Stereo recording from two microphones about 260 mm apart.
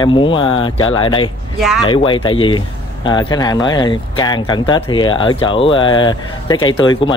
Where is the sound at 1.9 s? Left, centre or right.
Left.